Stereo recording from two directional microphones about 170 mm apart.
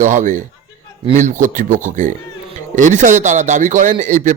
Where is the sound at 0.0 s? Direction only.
45° right (ahead or behind).